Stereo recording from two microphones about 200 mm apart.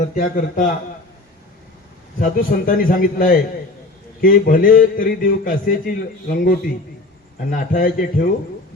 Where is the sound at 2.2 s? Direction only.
45° left (ahead or behind).